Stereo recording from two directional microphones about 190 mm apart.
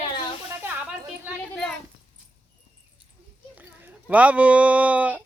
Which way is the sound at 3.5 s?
10° right (ahead or behind).